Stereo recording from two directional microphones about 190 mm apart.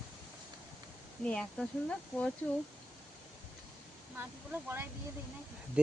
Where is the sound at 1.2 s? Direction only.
5° left (ahead or behind).